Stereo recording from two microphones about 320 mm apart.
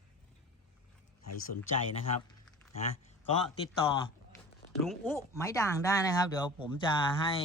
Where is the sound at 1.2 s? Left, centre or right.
Left.